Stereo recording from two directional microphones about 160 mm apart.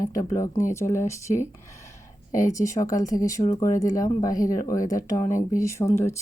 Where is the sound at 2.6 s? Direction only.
20° left (ahead or behind).